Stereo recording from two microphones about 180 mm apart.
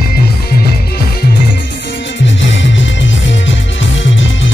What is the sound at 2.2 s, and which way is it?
Music, 90° left.